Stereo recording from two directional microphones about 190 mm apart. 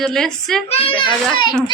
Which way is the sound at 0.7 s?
30° left (ahead or behind).